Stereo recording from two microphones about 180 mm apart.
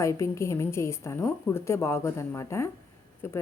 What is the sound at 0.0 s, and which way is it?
Speech, 15° left (ahead or behind).